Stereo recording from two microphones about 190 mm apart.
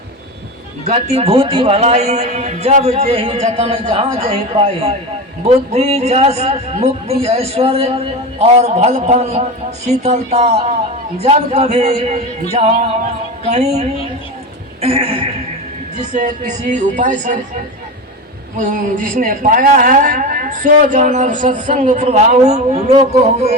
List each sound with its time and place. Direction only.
0.9 s a man's voice: 35° right (ahead or behind)
14.8 s speech: 30° right (ahead or behind)
16.0 s a man's voice: 40° right (ahead or behind)
18.5 s a man's voice: 45° right (ahead or behind)